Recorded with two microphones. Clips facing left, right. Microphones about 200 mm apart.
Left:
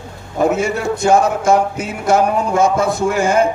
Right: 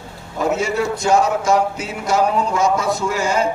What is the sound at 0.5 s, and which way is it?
Speech, 50° left (ahead or behind).